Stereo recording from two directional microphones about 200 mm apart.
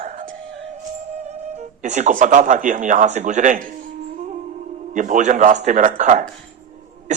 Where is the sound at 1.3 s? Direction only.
35° right (ahead or behind).